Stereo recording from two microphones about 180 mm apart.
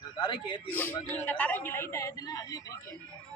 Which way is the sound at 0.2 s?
25° left (ahead or behind).